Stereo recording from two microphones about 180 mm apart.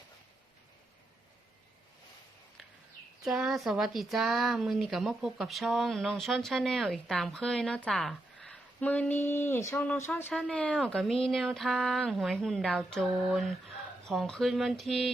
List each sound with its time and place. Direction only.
3.2 s speech: centre (ahead or behind)